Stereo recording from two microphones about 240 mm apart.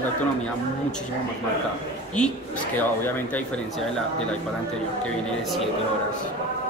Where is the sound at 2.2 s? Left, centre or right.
Centre.